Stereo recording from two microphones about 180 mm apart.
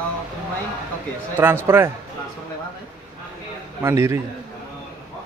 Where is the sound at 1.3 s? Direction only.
15° right (ahead or behind).